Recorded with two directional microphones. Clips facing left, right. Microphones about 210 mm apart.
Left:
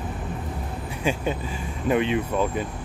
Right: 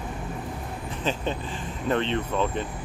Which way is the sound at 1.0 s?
10° left (ahead or behind).